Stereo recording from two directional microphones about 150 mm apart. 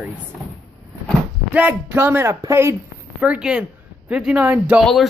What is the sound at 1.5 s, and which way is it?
Speech, 10° right (ahead or behind).